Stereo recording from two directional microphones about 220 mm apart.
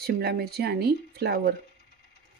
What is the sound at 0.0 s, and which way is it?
Speech, 45° right (ahead or behind).